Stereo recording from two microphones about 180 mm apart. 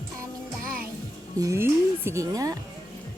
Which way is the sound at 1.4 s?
15° right (ahead or behind).